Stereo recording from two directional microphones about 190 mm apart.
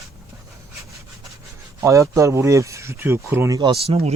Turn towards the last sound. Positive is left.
turn(degrees=-30)  # may be behind; listen again after turning